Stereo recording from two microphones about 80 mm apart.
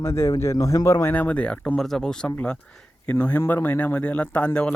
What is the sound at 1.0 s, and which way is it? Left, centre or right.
Speech, left.